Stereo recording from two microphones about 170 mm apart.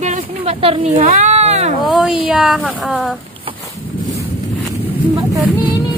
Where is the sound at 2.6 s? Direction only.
5° left (ahead or behind).